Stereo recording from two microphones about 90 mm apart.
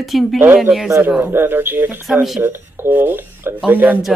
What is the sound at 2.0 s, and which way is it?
Speech, 5° right (ahead or behind).